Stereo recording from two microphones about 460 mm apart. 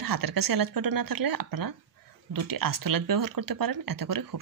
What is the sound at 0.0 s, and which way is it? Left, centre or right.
Speech, right.